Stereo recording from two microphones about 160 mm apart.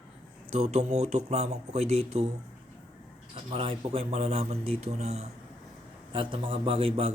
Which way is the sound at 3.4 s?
35° right (ahead or behind).